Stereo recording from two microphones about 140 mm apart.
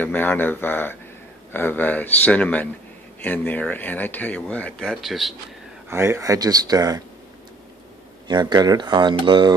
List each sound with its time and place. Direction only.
0.0 s speech: 10° left (ahead or behind)
5.9 s speech: 20° right (ahead or behind)
8.3 s speech: 30° right (ahead or behind)